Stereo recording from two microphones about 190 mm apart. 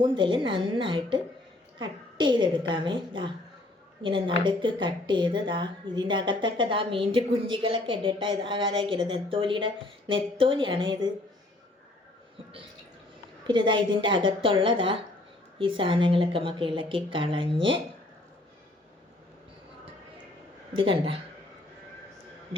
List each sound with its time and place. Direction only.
0.0 s a woman's voice: 25° right (ahead or behind)
13.5 s a woman's voice: 25° right (ahead or behind)
20.7 s a woman's voice: 25° right (ahead or behind)